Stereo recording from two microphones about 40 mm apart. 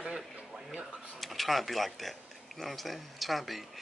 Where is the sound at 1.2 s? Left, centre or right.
Centre.